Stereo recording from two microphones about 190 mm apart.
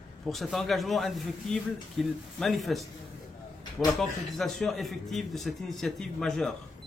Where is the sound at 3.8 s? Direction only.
Centre (ahead or behind).